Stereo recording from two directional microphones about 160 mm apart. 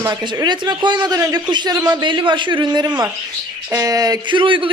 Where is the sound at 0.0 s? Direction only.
25° right (ahead or behind).